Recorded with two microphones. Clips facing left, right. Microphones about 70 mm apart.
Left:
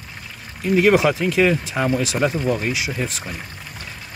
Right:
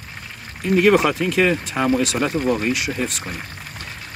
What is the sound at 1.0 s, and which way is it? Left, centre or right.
Speech, right.